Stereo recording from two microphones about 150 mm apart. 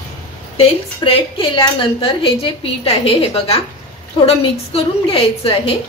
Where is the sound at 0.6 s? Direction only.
40° left (ahead or behind).